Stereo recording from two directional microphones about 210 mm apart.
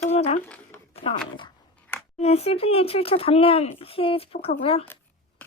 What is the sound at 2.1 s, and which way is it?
Speech, 30° left (ahead or behind).